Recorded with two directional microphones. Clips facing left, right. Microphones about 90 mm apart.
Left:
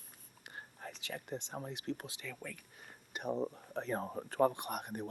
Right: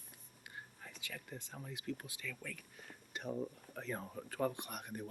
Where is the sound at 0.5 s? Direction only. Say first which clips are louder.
Left 5 dB; 50° left (ahead or behind).